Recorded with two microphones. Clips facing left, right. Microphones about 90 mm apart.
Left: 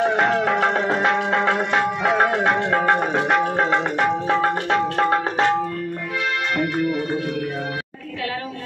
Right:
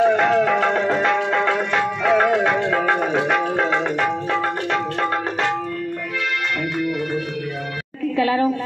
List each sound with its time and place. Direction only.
0.0 s music: 10° left (ahead or behind)
4.3 s music: 25° left (ahead or behind)